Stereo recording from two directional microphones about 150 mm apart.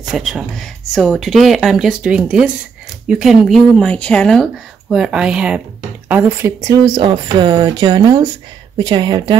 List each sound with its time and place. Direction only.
0.0 s speech: centre (ahead or behind); by 6.8 s 20° right (ahead or behind)
7.0 s speech: 35° right (ahead or behind)